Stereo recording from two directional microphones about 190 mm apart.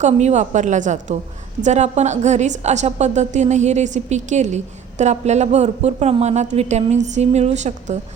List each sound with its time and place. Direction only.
0.0 s a woman's voice: 35° right (ahead or behind)